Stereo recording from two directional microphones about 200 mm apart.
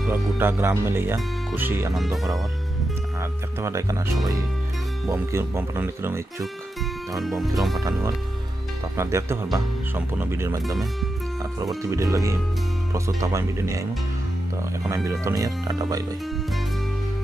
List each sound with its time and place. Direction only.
0.4 s speech: 10° right (ahead or behind)
3.2 s speech: 15° right (ahead or behind)
5.1 s speech: 15° right (ahead or behind)
7.2 s speech: centre (ahead or behind)
8.9 s speech: 15° right (ahead or behind)
11.8 s speech: 15° right (ahead or behind)
15.0 s speech: 15° right (ahead or behind)